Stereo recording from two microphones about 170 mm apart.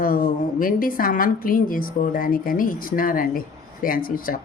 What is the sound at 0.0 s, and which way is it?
A woman's voice, 55° left (ahead or behind).